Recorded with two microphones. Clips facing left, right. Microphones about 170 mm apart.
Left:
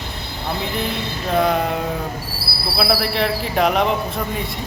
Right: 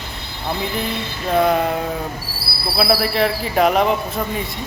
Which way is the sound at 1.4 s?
Centre (ahead or behind).